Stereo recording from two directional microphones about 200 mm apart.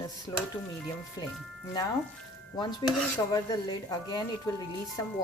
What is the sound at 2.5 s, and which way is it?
Speech, 20° left (ahead or behind).